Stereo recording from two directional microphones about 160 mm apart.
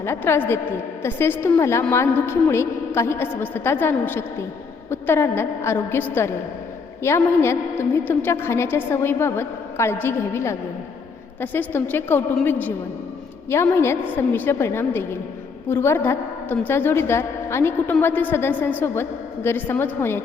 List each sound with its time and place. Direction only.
0.0 s a woman's voice: 15° left (ahead or behind)